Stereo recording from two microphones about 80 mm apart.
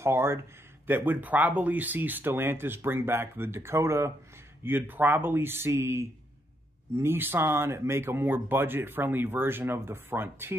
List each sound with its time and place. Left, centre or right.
0.0 s a sound: right
0.8 s speech: right
4.6 s speech: right